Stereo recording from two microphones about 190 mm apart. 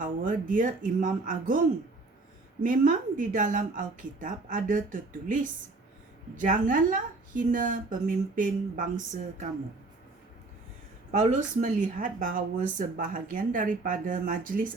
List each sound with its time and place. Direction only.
0.0 s speech: 45° right (ahead or behind)
11.1 s speech: 40° right (ahead or behind)